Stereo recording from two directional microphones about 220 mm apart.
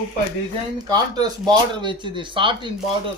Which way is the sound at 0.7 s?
20° right (ahead or behind).